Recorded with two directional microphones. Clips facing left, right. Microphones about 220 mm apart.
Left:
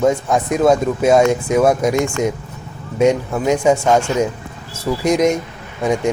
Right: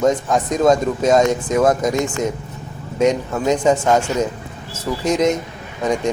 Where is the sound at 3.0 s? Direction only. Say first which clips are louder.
Left 2 dB; 10° left (ahead or behind).